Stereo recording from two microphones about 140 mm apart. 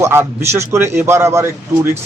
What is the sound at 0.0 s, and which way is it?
A man's voice, 20° right (ahead or behind).